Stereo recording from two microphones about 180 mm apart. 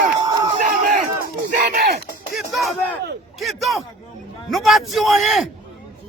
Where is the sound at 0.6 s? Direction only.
45° right (ahead or behind).